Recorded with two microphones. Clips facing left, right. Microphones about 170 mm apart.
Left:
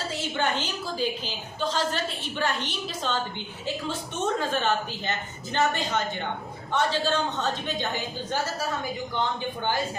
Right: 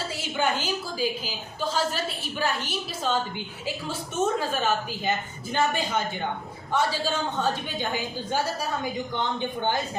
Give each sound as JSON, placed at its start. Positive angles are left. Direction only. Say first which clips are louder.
{"t": 0.1, "sound": "a woman's voice", "louder": "even", "side_deg": -10}